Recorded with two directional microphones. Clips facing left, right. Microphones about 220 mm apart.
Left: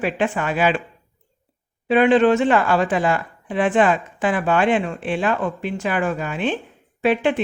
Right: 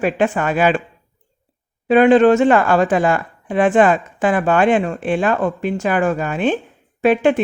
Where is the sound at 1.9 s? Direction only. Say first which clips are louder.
Right 4 dB; 45° right (ahead or behind).